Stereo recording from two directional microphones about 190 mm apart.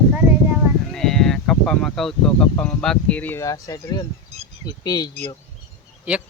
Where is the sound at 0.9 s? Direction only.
Centre (ahead or behind); by 5.1 s 20° left (ahead or behind).